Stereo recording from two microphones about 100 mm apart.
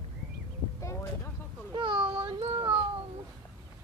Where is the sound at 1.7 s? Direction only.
55° right (ahead or behind).